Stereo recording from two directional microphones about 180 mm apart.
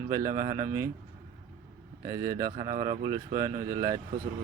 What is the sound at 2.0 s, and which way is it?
Speech, 20° right (ahead or behind).